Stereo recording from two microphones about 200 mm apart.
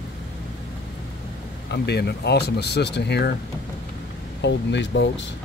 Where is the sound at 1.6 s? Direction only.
55° left (ahead or behind).